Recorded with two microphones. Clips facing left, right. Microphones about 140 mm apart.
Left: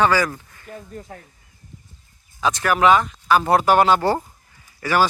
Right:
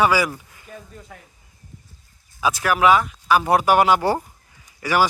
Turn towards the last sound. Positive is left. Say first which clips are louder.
# even
turn(degrees=-15)  # may be behind; listen again after turning